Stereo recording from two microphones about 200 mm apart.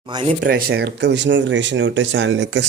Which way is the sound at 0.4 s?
50° right (ahead or behind).